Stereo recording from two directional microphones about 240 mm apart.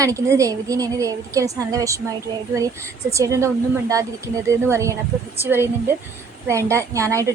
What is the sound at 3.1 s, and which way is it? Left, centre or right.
Speech, centre.